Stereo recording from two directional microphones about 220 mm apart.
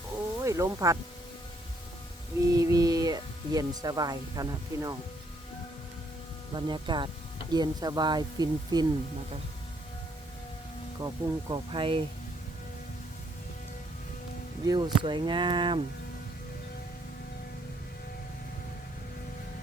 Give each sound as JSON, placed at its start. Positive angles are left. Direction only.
{"t": 0.3, "sound": "snake", "side_deg": -15}
{"t": 2.5, "sound": "speech", "side_deg": -15}
{"t": 6.5, "sound": "speech", "side_deg": -20}
{"t": 11.0, "sound": "speech", "side_deg": -20}
{"t": 14.6, "sound": "speech", "side_deg": -20}